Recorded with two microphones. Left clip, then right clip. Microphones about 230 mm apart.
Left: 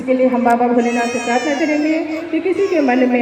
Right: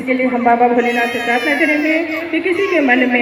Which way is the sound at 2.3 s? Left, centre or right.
Left.